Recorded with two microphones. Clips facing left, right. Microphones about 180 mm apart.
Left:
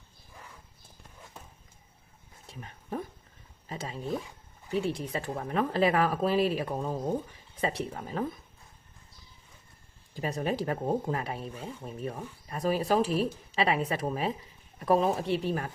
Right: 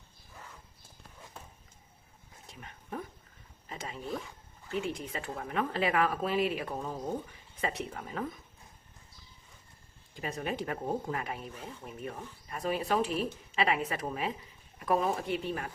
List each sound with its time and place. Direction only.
2.5 s a sound: 30° left (ahead or behind)
3.7 s speech: 30° left (ahead or behind)
10.2 s speech: 35° left (ahead or behind)